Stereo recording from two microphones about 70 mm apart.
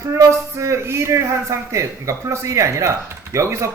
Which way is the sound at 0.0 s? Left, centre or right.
Right.